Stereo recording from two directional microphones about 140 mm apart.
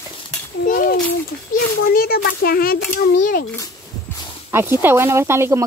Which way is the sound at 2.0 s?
90° left.